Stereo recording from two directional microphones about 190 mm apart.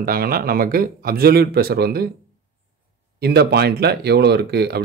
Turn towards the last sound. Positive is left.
turn(degrees=-60)  # may be behind; listen again after turning